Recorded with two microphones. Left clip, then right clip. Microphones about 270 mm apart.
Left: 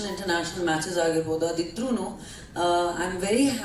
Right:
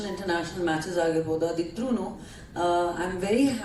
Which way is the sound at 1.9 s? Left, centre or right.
Right.